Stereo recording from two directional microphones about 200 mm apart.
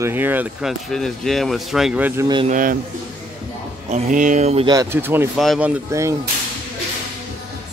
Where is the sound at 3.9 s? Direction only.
40° right (ahead or behind).